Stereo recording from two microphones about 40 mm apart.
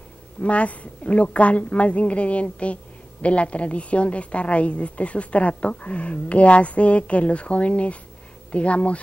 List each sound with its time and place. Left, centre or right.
0.4 s a woman's voice: left